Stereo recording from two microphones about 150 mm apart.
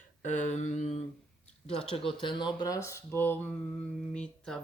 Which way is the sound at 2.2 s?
30° left (ahead or behind).